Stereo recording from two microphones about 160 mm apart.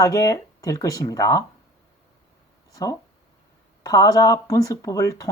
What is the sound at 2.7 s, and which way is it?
Speech, 20° left (ahead or behind).